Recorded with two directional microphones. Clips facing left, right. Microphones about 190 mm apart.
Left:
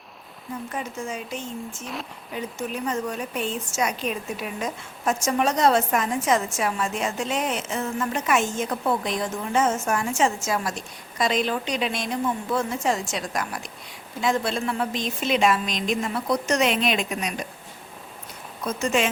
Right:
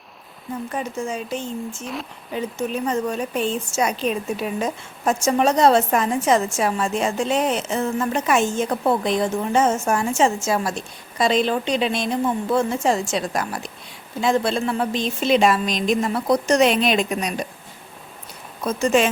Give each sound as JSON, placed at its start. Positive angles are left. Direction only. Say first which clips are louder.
{"t": 0.8, "sound": "a woman's voice", "louder": "right 5 dB", "side_deg": -35}
{"t": 1.8, "sound": "speech", "louder": "right 3 dB", "side_deg": 0}
{"t": 3.1, "sound": "a woman's voice", "louder": "right 5 dB", "side_deg": -30}
{"t": 18.6, "sound": "a woman's voice", "louder": "right 5 dB", "side_deg": -35}